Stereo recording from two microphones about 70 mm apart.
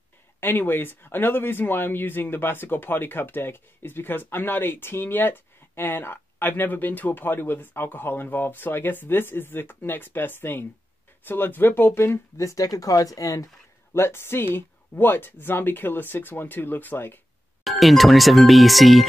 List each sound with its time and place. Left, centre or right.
0.4 s speech: left
12.4 s speech: left
13.9 s speech: left
17.6 s speech: centre